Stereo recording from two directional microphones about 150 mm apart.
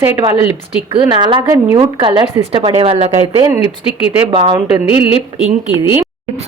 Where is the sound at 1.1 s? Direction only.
35° right (ahead or behind).